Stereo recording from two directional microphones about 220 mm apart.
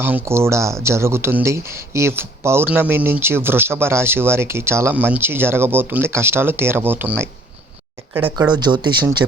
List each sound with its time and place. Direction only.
0.0 s speech: 10° right (ahead or behind)